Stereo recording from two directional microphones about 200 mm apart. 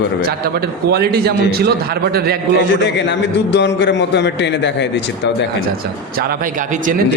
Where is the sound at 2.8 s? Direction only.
60° left (ahead or behind).